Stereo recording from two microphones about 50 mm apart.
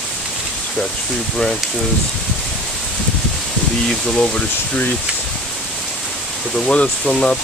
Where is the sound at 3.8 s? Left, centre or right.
Centre.